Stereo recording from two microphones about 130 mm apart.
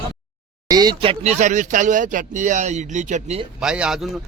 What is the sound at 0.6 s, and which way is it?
Speech, 30° right (ahead or behind).